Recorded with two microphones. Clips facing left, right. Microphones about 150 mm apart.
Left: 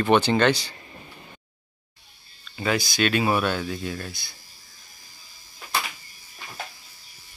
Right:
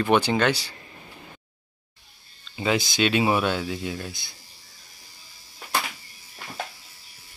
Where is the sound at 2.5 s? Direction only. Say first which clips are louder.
Right 1 dB; 20° right (ahead or behind).